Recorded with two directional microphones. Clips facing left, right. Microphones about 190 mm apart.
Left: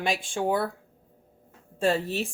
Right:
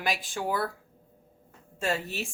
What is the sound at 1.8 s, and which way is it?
Speech, 30° left (ahead or behind).